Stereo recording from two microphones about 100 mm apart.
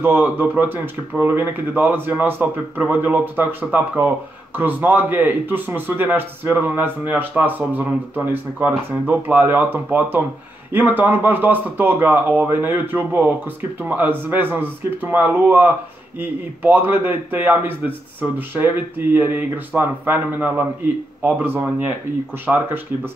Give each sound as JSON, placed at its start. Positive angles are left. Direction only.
{"t": 0.0, "sound": "a man's voice", "side_deg": -20}
{"t": 22.5, "sound": "speech", "side_deg": -5}